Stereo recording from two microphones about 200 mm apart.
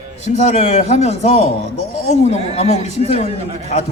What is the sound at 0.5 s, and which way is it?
A man's voice, 35° left (ahead or behind).